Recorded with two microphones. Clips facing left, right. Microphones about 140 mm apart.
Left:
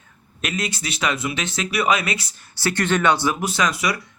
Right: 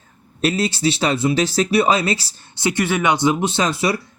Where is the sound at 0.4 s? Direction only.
30° right (ahead or behind).